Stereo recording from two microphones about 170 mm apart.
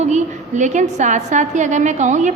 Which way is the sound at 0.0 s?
45° right (ahead or behind).